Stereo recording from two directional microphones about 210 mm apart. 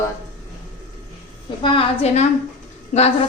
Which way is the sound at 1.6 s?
25° left (ahead or behind).